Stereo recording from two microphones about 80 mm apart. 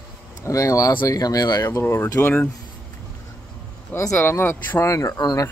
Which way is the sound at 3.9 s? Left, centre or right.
Left.